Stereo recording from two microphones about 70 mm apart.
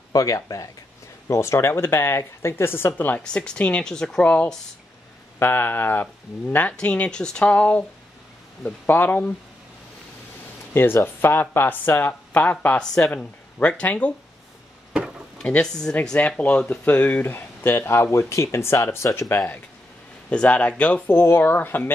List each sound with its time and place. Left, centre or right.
0.1 s speech: left
1.3 s speech: left
3.2 s speech: centre
4.2 s speech: left
5.4 s speech: left
8.8 s speech: left
10.7 s speech: left
12.8 s speech: centre
15.3 s speech: centre
17.3 s speech: left
20.2 s speech: centre
21.1 s speech: left